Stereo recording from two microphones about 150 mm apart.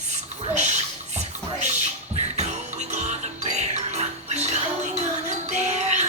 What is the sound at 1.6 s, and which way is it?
Music, 50° right (ahead or behind).